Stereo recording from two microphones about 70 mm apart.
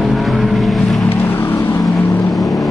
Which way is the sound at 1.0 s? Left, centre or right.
Left.